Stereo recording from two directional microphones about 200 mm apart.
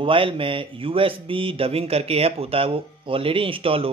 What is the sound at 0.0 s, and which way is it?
Speech, 25° right (ahead or behind).